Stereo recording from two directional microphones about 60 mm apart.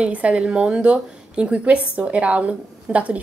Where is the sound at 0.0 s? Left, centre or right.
Right.